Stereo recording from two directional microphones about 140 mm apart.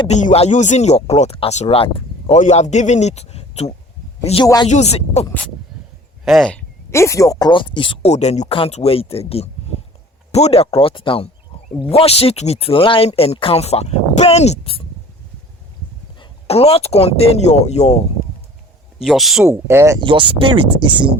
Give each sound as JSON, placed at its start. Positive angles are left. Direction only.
{"t": 0.1, "sound": "speech", "side_deg": 60}
{"t": 2.4, "sound": "speech", "side_deg": 55}
{"t": 4.4, "sound": "speech", "side_deg": 30}
{"t": 4.7, "sound": "speech", "side_deg": 50}
{"t": 6.2, "sound": "speech", "side_deg": 0}
{"t": 6.9, "sound": "speech", "side_deg": 20}
{"t": 8.1, "sound": "speech", "side_deg": 55}
{"t": 16.5, "sound": "speech", "side_deg": 45}
{"t": 19.0, "sound": "speech", "side_deg": 0}
{"t": 19.5, "sound": "speech", "side_deg": -20}
{"t": 20.0, "sound": "speech", "side_deg": -35}